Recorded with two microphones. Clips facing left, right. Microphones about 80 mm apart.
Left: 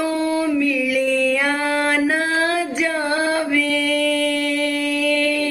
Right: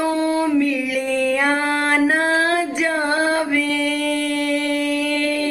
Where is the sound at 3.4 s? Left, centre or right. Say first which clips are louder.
Even; right.